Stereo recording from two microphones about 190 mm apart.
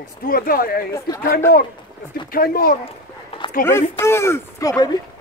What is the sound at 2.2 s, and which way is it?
Speech, 50° left (ahead or behind).